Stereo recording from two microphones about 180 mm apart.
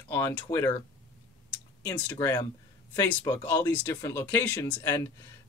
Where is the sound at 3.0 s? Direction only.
10° left (ahead or behind).